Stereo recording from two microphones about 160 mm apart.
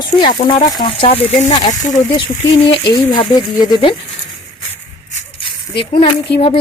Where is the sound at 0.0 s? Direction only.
30° left (ahead or behind).